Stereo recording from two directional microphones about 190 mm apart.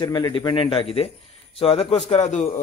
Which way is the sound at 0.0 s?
20° left (ahead or behind).